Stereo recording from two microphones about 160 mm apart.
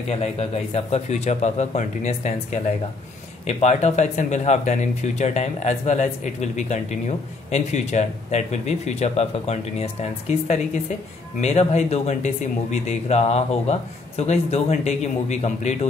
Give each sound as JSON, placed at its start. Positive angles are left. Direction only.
{"t": 0.1, "sound": "speech", "side_deg": 40}